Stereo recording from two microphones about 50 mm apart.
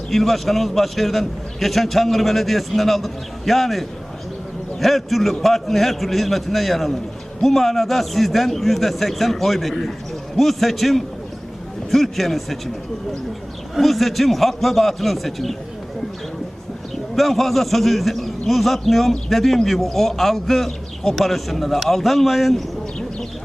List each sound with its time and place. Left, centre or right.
0.1 s a man's voice: centre
17.2 s a man's voice: centre